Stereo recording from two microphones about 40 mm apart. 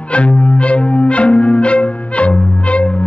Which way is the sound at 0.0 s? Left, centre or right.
Left.